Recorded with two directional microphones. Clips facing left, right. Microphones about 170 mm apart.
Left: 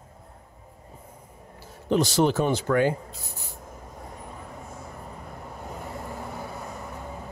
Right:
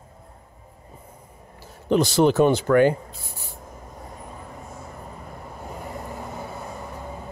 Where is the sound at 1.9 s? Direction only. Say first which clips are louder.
Right 3 dB; 60° right (ahead or behind).